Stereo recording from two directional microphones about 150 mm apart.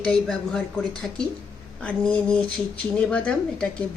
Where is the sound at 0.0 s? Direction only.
5° left (ahead or behind).